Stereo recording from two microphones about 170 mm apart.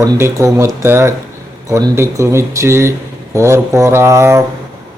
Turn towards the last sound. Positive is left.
turn(degrees=-15)  # may be behind; listen again after turning